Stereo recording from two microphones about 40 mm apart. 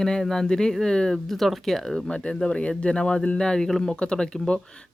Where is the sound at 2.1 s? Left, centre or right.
Left.